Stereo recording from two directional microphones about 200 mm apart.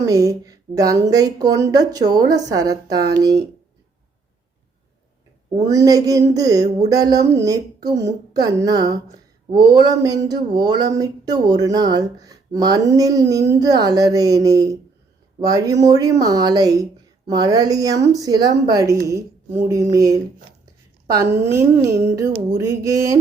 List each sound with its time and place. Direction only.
0.0 s speech: 15° right (ahead or behind)
5.5 s speech: 20° right (ahead or behind)